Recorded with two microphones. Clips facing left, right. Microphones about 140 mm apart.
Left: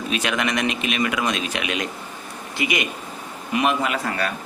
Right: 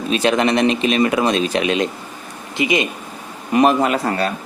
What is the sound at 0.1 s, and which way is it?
Speech, 30° right (ahead or behind).